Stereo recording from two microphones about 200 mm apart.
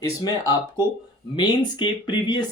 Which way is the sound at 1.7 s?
20° left (ahead or behind).